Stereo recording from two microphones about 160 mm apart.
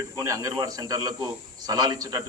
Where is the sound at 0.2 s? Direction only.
20° right (ahead or behind).